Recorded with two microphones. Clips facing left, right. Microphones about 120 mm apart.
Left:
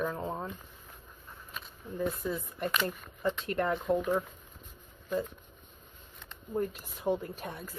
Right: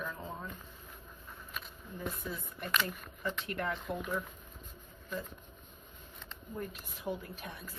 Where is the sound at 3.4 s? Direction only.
40° left (ahead or behind).